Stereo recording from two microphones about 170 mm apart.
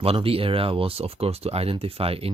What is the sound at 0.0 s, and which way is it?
Speech, 35° right (ahead or behind).